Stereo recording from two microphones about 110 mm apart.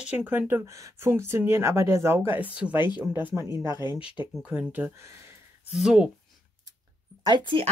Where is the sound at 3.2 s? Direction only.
25° right (ahead or behind).